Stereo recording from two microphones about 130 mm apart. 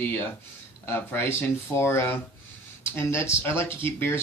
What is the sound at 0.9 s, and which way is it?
Speech, 15° left (ahead or behind).